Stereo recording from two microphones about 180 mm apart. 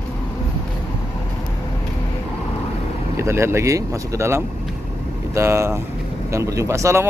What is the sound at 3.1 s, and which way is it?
Speech, 15° right (ahead or behind).